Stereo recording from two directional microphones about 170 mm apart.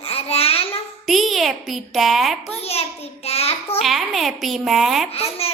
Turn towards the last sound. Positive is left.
turn(degrees=35)  # may be behind; listen again after turning